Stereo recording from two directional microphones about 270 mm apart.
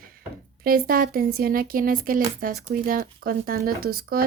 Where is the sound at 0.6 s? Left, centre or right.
Right.